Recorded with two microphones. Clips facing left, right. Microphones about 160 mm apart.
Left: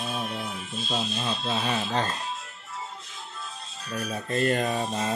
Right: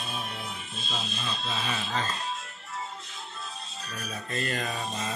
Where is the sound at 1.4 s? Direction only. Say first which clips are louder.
Left 5 dB; 50° left (ahead or behind).